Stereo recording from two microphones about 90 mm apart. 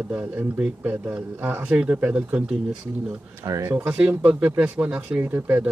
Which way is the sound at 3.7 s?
15° right (ahead or behind).